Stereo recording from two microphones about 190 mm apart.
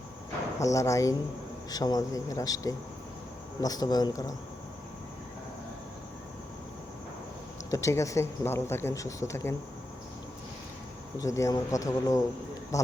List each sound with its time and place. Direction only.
0.6 s a man's voice: 15° left (ahead or behind)
7.7 s speech: 15° left (ahead or behind)
11.2 s speech: 15° left (ahead or behind)